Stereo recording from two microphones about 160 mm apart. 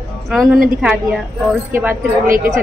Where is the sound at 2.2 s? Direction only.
60° right (ahead or behind).